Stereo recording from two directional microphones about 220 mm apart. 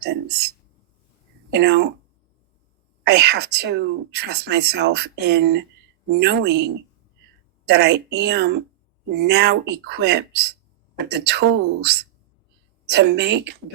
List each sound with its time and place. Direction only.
0.0 s speech: 50° right (ahead or behind)
3.0 s speech: 50° right (ahead or behind)